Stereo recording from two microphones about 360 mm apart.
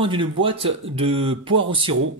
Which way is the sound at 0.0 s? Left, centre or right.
Centre.